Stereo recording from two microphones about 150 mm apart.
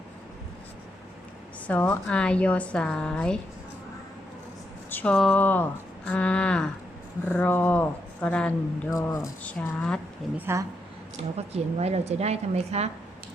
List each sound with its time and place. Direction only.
1.6 s a woman's voice: 10° left (ahead or behind)
4.9 s a sound: 10° left (ahead or behind)
5.1 s a woman's voice: 5° left (ahead or behind)
8.9 s speech: 20° left (ahead or behind)
9.4 s a woman's voice: 10° left (ahead or behind)
10.3 s speech: 15° right (ahead or behind)
11.3 s a woman's voice: 45° right (ahead or behind)